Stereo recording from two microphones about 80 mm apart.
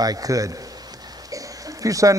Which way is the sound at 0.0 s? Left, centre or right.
Right.